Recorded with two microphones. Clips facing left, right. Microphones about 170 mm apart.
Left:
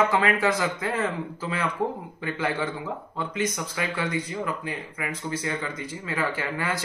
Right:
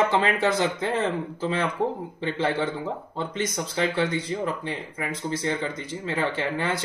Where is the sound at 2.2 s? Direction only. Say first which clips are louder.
Right 2 dB; 30° right (ahead or behind).